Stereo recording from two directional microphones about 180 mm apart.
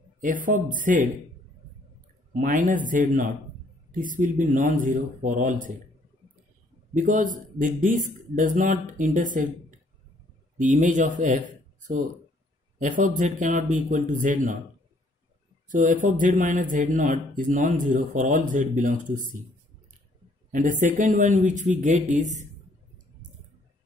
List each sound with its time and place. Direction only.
0.2 s speech: 50° right (ahead or behind)
2.4 s speech: 45° right (ahead or behind)
6.9 s speech: 45° right (ahead or behind)
10.6 s speech: 45° right (ahead or behind)
12.7 s speech: 45° right (ahead or behind)
15.7 s speech: 45° right (ahead or behind)
20.5 s speech: 45° right (ahead or behind)